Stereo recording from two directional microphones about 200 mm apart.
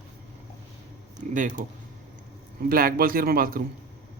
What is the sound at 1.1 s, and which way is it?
Speech, 40° right (ahead or behind).